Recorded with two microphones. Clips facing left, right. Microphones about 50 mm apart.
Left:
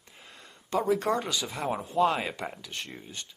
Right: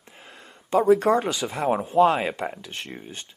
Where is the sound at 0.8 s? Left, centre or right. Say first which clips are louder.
Right 8 dB; right.